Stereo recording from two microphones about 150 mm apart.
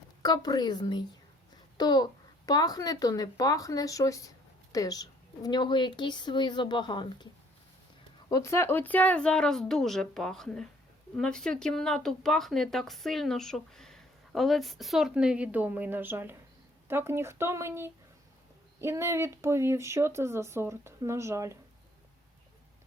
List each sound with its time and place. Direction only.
0.2 s a woman's voice: 25° left (ahead or behind)
8.3 s speech: 20° left (ahead or behind); by 21.6 s 20° right (ahead or behind)